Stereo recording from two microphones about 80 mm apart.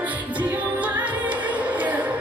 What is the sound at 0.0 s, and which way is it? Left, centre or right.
Music, centre.